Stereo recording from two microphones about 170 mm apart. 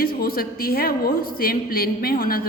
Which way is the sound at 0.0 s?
60° left (ahead or behind).